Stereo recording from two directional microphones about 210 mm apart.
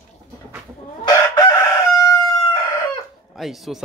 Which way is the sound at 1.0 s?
20° left (ahead or behind).